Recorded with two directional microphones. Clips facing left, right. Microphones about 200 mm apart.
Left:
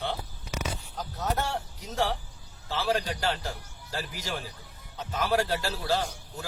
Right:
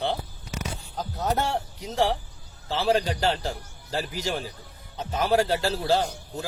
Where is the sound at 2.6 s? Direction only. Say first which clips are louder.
Right 5 dB; 25° right (ahead or behind).